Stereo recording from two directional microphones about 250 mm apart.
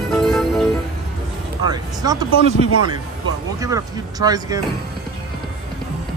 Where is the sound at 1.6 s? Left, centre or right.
Centre.